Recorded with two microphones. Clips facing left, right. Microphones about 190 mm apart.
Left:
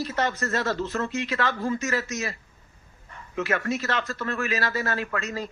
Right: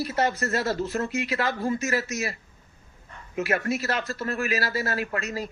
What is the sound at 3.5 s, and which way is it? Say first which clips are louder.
Speech: even; 40° right (ahead or behind).